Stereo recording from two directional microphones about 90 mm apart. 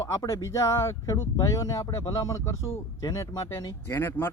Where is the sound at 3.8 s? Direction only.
30° left (ahead or behind).